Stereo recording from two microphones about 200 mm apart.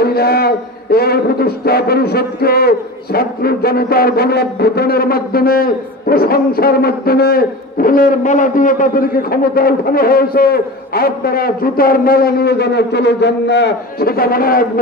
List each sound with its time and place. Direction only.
0.0 s a man's voice: 50° left (ahead or behind)